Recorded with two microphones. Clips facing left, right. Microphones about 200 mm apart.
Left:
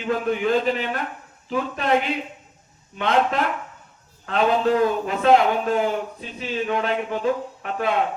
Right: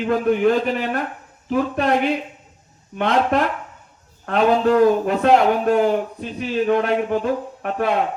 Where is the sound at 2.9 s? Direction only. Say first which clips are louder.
Right 3 dB; 55° right (ahead or behind).